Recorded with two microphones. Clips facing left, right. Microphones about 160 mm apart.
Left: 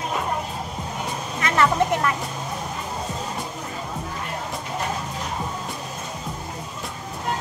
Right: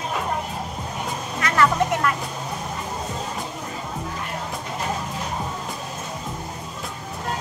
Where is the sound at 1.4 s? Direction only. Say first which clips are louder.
Even; 25° left (ahead or behind).